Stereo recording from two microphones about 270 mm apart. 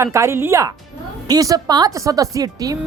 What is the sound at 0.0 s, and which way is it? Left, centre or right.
Speech, centre.